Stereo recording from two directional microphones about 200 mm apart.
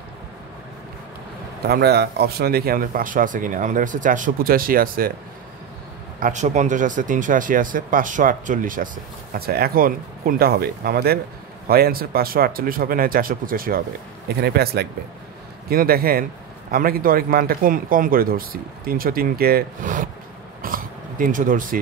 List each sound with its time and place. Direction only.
1.7 s speech: 55° right (ahead or behind)
6.1 s speech: 40° right (ahead or behind)
20.6 s a sound: 45° right (ahead or behind)